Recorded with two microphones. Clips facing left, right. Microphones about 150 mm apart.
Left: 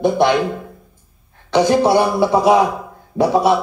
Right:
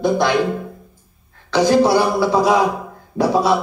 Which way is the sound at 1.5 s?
15° left (ahead or behind).